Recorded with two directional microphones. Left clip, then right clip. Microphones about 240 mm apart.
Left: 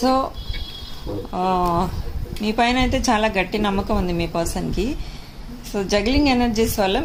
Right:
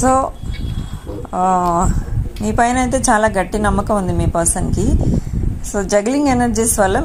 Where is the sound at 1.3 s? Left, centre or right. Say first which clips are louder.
Right 6 dB; centre.